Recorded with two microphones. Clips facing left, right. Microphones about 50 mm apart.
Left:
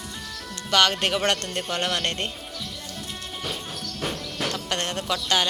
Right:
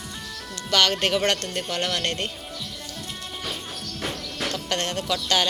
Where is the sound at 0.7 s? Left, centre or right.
Centre.